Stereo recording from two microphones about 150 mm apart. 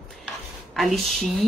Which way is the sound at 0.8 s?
Centre (ahead or behind).